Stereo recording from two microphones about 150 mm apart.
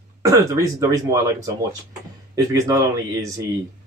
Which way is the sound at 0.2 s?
25° right (ahead or behind).